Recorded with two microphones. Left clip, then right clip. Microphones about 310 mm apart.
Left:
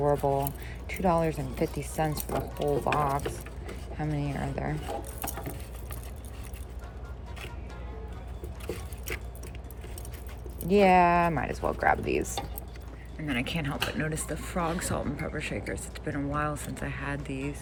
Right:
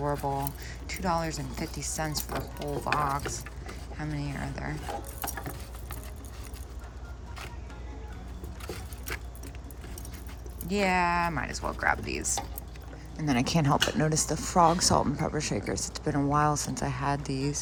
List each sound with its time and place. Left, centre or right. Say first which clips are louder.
0.2 s speech: left 4 dB; right
0.4 s speech: left 1 dB; centre
10.7 s speech: left 5 dB; centre